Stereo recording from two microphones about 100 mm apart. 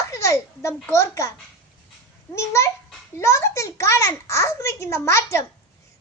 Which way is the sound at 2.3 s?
30° left (ahead or behind).